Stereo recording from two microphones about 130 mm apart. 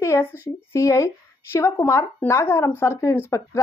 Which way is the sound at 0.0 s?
20° left (ahead or behind).